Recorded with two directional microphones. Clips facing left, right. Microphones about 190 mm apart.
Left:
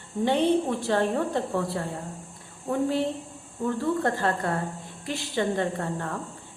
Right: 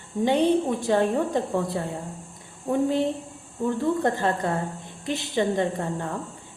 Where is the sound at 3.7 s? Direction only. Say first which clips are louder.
Right 2 dB; 20° right (ahead or behind).